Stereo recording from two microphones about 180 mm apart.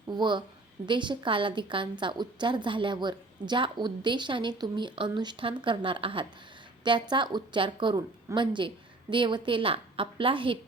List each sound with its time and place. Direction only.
0.1 s a woman's voice: 25° right (ahead or behind)